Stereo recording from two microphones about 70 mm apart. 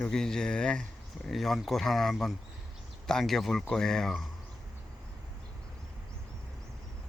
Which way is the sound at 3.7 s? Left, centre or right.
Centre.